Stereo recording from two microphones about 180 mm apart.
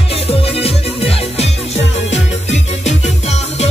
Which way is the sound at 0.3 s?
35° left (ahead or behind).